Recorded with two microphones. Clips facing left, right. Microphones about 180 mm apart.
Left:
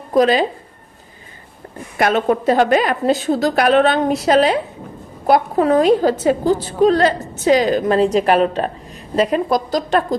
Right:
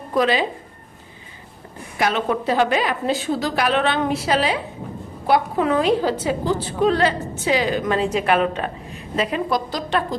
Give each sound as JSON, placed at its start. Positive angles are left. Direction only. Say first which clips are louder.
{"t": 0.1, "sound": "speech", "louder": "left 5 dB", "side_deg": 40}
{"t": 2.0, "sound": "a woman's voice", "louder": "left 5 dB", "side_deg": 50}